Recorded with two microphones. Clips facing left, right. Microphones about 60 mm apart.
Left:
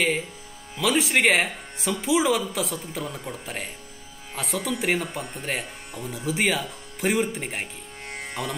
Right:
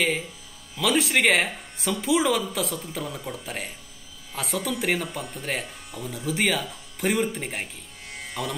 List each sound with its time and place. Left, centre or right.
0.7 s speech: centre
8.1 s music: left